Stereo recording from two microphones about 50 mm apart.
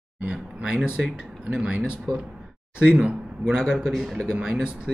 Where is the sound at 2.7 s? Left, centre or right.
Centre.